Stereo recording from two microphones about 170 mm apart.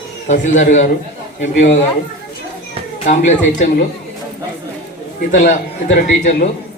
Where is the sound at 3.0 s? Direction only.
45° left (ahead or behind).